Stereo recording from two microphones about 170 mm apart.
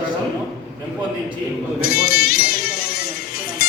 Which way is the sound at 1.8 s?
60° left (ahead or behind).